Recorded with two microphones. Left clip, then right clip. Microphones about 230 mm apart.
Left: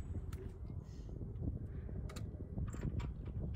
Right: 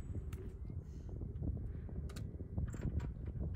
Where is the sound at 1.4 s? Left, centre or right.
Left.